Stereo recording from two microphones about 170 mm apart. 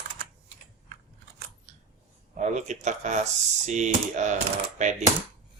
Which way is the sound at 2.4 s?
45° right (ahead or behind).